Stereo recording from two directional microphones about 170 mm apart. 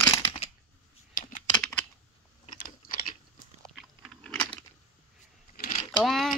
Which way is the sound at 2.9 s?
55° left (ahead or behind).